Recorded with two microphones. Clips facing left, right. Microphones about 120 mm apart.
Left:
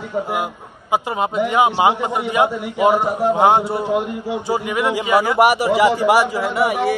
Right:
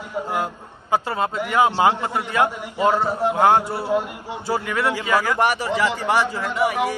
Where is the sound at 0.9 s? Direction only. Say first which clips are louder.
Left 3 dB; 15° left (ahead or behind).